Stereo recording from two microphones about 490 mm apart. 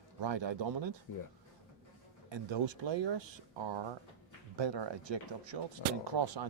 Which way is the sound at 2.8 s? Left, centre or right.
Right.